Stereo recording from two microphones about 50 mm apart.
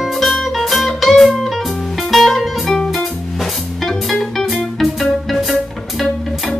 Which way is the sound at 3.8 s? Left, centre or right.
Centre.